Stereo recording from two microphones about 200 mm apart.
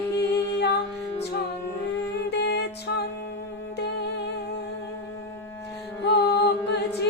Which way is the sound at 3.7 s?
55° left (ahead or behind).